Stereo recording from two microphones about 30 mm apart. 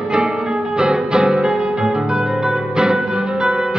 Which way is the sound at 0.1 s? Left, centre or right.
Right.